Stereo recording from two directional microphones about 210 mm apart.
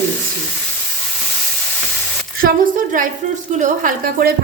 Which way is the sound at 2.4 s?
40° right (ahead or behind).